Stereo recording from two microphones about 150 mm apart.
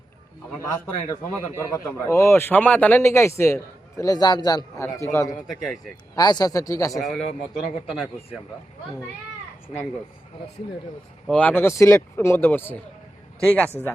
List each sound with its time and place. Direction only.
0.6 s speech: 15° left (ahead or behind)
5.5 s a man's voice: centre (ahead or behind)
6.1 s speech: 25° left (ahead or behind)
7.0 s a man's voice: centre (ahead or behind)
11.3 s speech: 10° left (ahead or behind)